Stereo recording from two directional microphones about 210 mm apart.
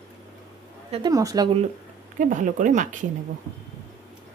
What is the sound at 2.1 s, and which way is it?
Speech, 40° right (ahead or behind).